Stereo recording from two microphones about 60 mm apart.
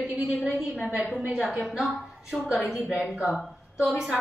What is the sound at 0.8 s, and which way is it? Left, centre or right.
A woman's voice, centre.